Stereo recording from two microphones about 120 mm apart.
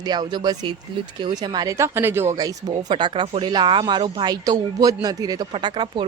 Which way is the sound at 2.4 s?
30° right (ahead or behind).